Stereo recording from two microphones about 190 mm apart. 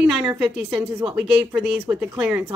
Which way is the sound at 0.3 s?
10° right (ahead or behind).